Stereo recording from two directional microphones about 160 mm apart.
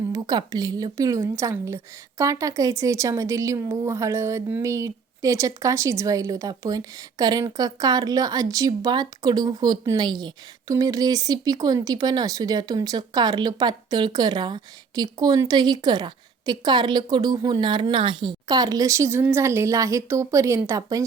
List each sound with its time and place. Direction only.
0.1 s a woman's voice: 25° right (ahead or behind)